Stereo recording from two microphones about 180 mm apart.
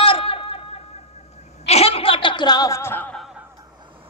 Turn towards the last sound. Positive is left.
turn(degrees=0)  # may be behind; listen again after turning